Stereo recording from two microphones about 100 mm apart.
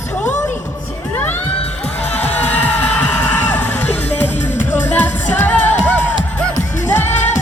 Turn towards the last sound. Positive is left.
turn(degrees=15)  # may be behind; listen again after turning